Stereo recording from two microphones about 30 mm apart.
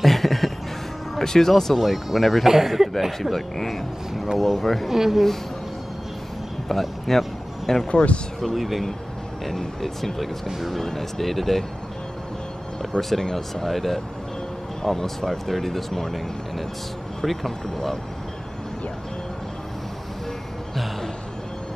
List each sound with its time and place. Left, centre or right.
0.0 s music: centre
1.1 s speech: centre
3.1 s speech: centre
4.9 s speech: centre
6.7 s a sound: centre
7.9 s speech: left
8.5 s speech: centre
9.5 s speech: centre
13.1 s speech: centre